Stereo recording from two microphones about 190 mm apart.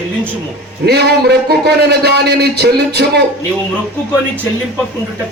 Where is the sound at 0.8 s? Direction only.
60° right (ahead or behind).